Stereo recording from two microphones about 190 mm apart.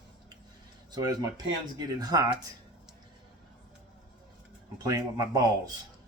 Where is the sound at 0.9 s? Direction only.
20° right (ahead or behind).